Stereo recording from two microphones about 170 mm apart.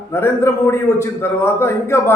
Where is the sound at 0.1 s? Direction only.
15° left (ahead or behind).